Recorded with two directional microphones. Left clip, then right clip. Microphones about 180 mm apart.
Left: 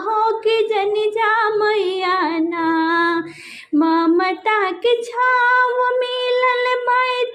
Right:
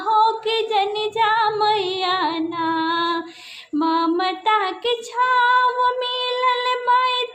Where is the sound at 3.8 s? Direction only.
25° left (ahead or behind).